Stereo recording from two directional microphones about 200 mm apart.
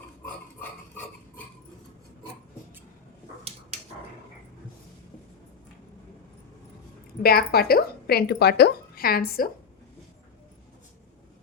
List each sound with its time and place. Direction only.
7.2 s speech: 50° left (ahead or behind)